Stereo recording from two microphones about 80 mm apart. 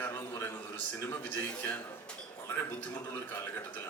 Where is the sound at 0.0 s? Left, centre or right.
Left.